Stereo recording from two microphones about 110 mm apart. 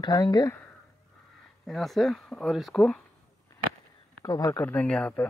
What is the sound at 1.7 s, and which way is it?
Speech, centre (ahead or behind).